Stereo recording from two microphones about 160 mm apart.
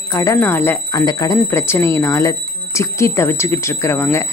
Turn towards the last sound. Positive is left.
turn(degrees=15)  # may be behind; listen again after turning